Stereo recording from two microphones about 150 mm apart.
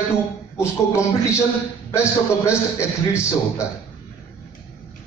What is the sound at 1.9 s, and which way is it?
A man's voice, 20° left (ahead or behind).